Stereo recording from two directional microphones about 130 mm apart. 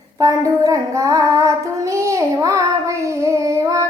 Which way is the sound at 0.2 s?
25° right (ahead or behind).